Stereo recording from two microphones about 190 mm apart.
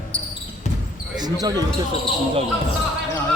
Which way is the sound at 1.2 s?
20° right (ahead or behind).